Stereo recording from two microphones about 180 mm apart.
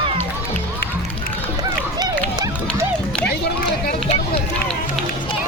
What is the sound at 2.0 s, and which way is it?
Run, 20° right (ahead or behind).